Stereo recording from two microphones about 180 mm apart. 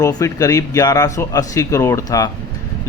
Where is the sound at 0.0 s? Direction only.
20° left (ahead or behind).